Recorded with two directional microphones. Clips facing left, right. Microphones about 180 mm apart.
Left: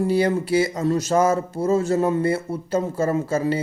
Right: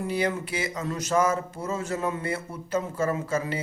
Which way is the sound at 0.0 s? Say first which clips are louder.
Left 7 dB; 35° left (ahead or behind).